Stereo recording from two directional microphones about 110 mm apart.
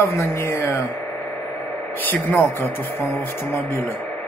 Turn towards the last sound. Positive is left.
turn(degrees=20)  # may be behind; listen again after turning